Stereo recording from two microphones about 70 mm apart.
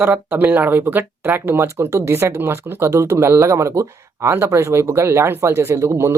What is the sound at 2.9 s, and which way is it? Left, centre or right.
Speech, right.